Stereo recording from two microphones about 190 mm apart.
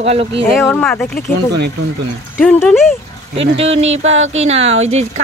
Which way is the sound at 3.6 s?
35° right (ahead or behind).